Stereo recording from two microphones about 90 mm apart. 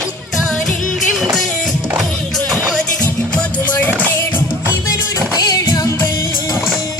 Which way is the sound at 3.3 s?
20° left (ahead or behind).